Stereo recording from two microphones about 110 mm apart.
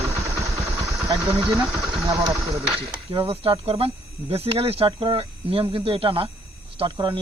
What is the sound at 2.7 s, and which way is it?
Speech, 55° right (ahead or behind).